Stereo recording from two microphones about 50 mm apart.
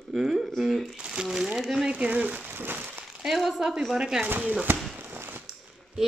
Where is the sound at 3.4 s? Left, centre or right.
Centre.